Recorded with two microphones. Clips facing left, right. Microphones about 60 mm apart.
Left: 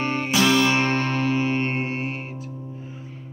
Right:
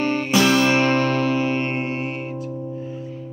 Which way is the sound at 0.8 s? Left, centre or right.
Left.